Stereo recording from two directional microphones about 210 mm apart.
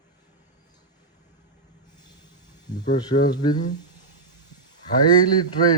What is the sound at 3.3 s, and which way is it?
Speech, 20° left (ahead or behind).